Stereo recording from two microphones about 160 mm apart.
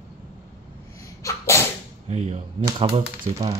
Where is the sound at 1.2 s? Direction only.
20° left (ahead or behind).